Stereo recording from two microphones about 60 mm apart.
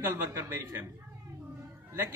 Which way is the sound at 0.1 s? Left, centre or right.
Right.